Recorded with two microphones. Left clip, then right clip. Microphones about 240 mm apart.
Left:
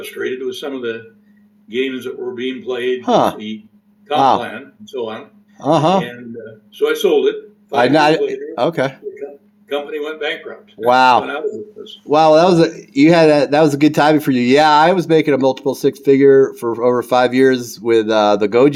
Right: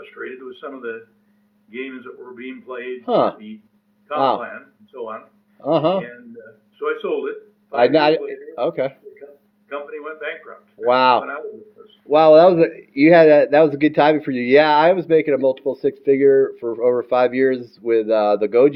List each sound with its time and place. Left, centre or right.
0.4 s speech: centre
3.0 s speech: left
4.4 s speech: centre
5.5 s speech: left
6.7 s speech: centre
7.8 s speech: left
9.6 s speech: centre